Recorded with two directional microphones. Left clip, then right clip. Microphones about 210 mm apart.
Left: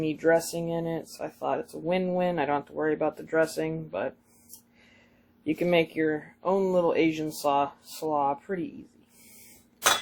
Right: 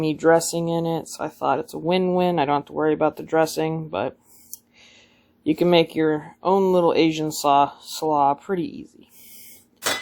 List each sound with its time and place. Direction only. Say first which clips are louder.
0.0 s speech: right 6 dB; 40° right (ahead or behind)
5.4 s speech: right 7 dB; 40° right (ahead or behind)